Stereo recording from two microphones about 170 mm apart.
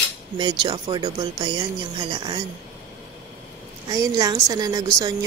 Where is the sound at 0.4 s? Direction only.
25° right (ahead or behind).